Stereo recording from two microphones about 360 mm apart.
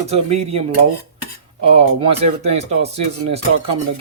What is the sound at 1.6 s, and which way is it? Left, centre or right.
Speech, centre.